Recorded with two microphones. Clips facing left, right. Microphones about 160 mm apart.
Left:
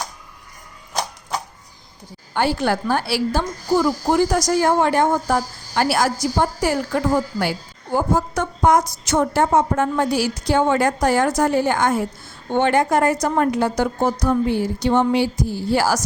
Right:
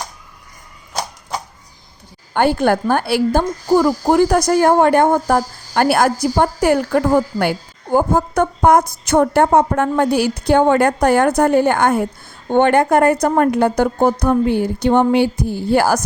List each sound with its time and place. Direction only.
2.3 s a woman's voice: 55° right (ahead or behind)